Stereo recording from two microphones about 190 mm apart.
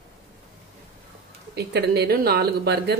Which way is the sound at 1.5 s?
60° right (ahead or behind).